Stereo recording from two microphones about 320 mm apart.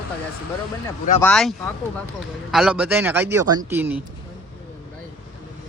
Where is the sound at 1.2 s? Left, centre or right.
Centre.